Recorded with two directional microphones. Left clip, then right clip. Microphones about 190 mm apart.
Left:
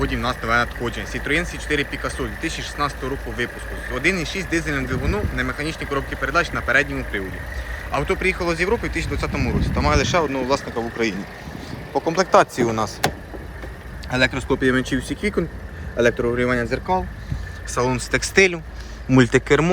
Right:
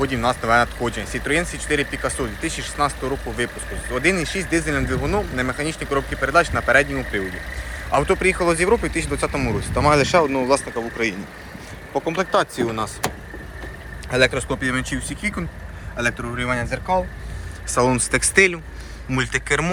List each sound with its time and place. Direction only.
0.0 s speech: 5° right (ahead or behind)
10.8 s speech: 15° left (ahead or behind)
14.1 s speech: 5° left (ahead or behind); by 17.0 s 10° right (ahead or behind)
17.7 s speech: centre (ahead or behind)
19.1 s speech: 30° left (ahead or behind)